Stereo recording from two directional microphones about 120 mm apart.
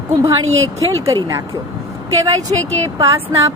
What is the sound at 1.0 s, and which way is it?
Speech, 25° right (ahead or behind).